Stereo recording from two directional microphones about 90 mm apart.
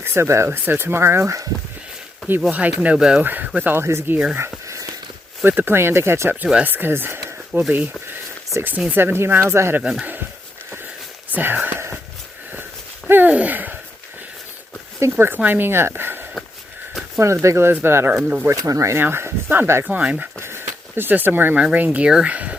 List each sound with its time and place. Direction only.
0.0 s speech: 30° right (ahead or behind)
2.5 s speech: 15° right (ahead or behind)
5.4 s speech: 20° right (ahead or behind)
9.8 s speech: 10° right (ahead or behind)
11.3 s speech: 20° right (ahead or behind)
13.1 s speech: 20° right (ahead or behind)
15.1 s speech: 20° right (ahead or behind)
18.4 s speech: 35° right (ahead or behind)
18.9 s speech: 25° right (ahead or behind)
19.9 s speech: 15° right (ahead or behind)
20.4 s speech: 25° right (ahead or behind)
21.6 s speech: 10° right (ahead or behind)